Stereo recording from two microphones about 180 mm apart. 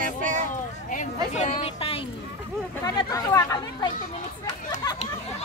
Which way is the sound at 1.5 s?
30° left (ahead or behind).